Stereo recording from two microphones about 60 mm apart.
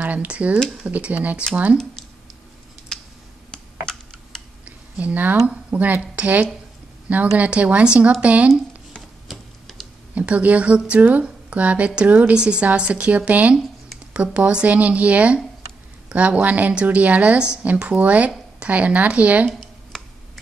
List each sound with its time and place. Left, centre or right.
0.0 s a woman's voice: right
2.9 s computer keyboard: centre
4.6 s a sound: right
5.5 s a woman's voice: right
9.3 s tick-tock: centre
10.1 s a woman's voice: right